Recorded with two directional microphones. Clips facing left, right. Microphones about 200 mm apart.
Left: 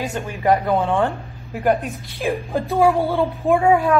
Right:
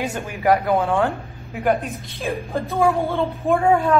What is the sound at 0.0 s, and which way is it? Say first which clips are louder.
Speech: even; 5° right (ahead or behind).